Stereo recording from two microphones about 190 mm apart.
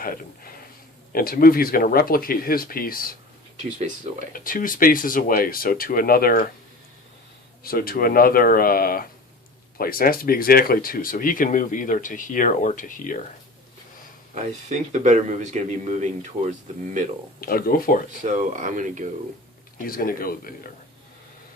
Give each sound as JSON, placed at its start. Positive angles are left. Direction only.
{"t": 0.0, "sound": "a sound", "side_deg": 50}
{"t": 1.1, "sound": "speech", "side_deg": 50}
{"t": 4.3, "sound": "speech", "side_deg": 45}
{"t": 7.6, "sound": "speech", "side_deg": 50}
{"t": 14.3, "sound": "speech", "side_deg": -40}
{"t": 17.4, "sound": "speech", "side_deg": 50}
{"t": 18.2, "sound": "speech", "side_deg": -40}
{"t": 19.8, "sound": "speech", "side_deg": 50}